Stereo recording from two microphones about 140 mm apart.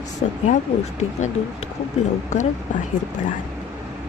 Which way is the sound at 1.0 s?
55° left (ahead or behind).